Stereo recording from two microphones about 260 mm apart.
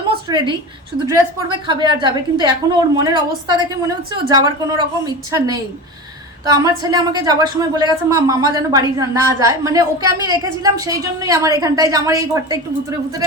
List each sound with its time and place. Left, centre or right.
0.3 s a woman's voice: centre